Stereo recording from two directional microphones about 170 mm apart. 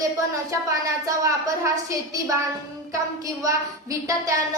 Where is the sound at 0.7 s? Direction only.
20° right (ahead or behind).